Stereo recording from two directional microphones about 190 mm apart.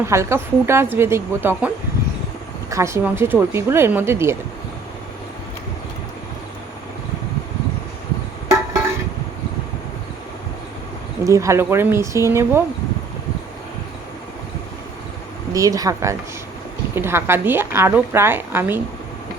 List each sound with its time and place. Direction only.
0.0 s a woman's voice: 15° right (ahead or behind)
11.2 s a woman's voice: 15° right (ahead or behind)
15.5 s a woman's voice: 20° right (ahead or behind)